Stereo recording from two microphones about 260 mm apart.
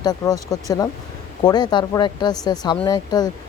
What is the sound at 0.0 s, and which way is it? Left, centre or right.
Speech, centre.